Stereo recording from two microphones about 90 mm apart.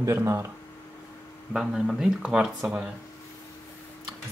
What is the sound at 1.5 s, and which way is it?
Speech, 5° right (ahead or behind).